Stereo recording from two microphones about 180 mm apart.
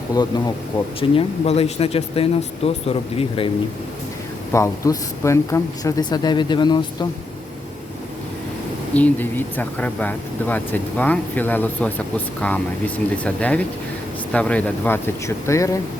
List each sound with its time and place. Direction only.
0.1 s speech: 20° left (ahead or behind)
0.9 s speech: 35° left (ahead or behind)
4.5 s speech: 15° left (ahead or behind)
9.0 s speech: 10° left (ahead or behind)